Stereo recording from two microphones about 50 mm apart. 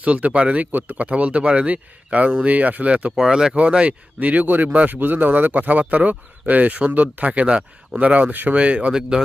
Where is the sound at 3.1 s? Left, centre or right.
Centre.